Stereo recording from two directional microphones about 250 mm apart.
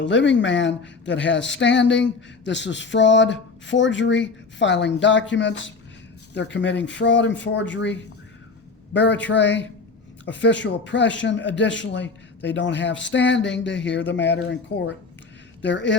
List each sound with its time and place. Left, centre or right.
0.0 s a woman's voice: left